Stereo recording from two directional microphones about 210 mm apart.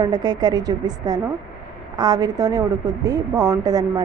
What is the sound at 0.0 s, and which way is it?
A woman's voice, 20° right (ahead or behind).